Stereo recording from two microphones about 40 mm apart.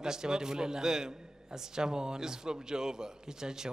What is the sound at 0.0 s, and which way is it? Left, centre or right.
A man's voice, centre.